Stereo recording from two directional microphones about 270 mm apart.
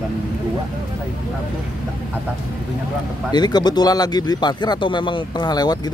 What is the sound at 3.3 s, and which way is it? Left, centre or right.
Speech, centre.